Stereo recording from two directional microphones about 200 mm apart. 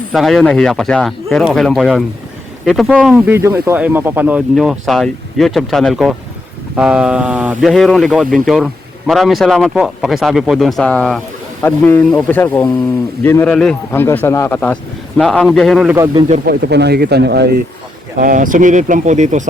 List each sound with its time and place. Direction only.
0.1 s speech: centre (ahead or behind)
3.2 s a man's voice: 15° right (ahead or behind)
16.5 s speech: 55° right (ahead or behind)
18.2 s speech: 40° right (ahead or behind)